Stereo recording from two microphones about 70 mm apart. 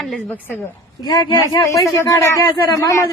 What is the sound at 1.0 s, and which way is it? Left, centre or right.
Speech, left.